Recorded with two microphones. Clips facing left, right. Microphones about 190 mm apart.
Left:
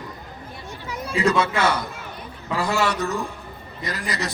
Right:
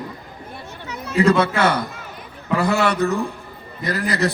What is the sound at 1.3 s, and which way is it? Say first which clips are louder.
A man's voice: right 2 dB; 60° right (ahead or behind).